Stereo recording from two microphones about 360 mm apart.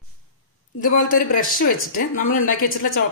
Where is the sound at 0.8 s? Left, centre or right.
Left.